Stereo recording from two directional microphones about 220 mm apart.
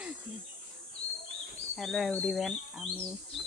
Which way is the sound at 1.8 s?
Centre (ahead or behind).